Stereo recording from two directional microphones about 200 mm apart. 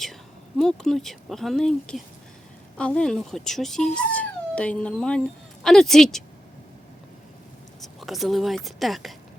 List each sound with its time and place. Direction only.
0.0 s speech: centre (ahead or behind)
7.8 s speech: centre (ahead or behind)